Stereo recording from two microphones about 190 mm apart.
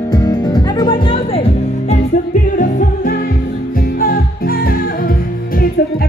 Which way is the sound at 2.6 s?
45° left (ahead or behind).